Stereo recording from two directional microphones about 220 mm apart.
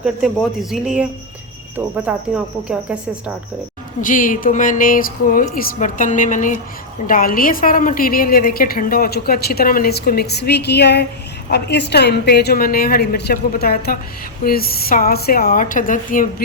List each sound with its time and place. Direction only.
0.0 s speech: centre (ahead or behind)
4.0 s a woman's voice: 35° left (ahead or behind)